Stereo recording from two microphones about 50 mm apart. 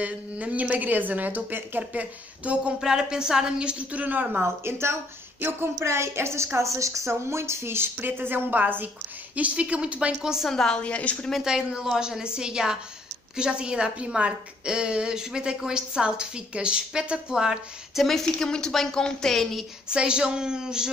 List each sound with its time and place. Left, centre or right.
0.0 s a woman's voice: right
1.8 s speech: right
2.8 s a woman's voice: centre
4.0 s a woman's voice: right
4.4 s a woman's voice: right
5.4 s a sound: right
5.8 s a woman's voice: right
9.3 s speech: right
10.2 s a woman's voice: centre
10.5 s a woman's voice: centre
10.8 s a woman's voice: left
11.4 s a woman's voice: centre
18.0 s a woman's voice: centre
19.9 s a woman's voice: centre